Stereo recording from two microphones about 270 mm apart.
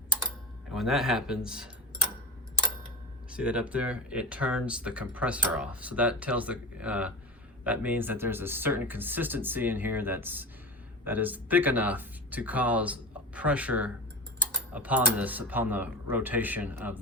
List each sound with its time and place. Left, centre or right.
0.7 s speech: centre
3.3 s speech: centre